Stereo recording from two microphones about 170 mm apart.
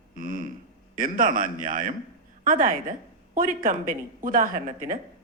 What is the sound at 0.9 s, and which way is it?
A woman's voice, 55° right (ahead or behind).